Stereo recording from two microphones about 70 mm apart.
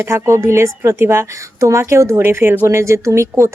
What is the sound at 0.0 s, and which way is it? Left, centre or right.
A woman's voice, right.